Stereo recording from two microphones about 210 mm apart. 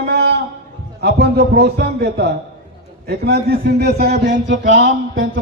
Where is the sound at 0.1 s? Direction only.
50° right (ahead or behind).